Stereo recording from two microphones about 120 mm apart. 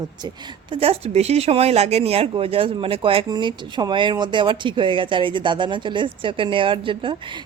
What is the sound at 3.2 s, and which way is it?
Speech, 35° right (ahead or behind).